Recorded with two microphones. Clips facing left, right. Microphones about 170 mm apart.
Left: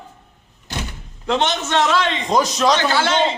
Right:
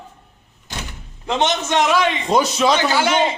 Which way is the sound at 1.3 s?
15° right (ahead or behind).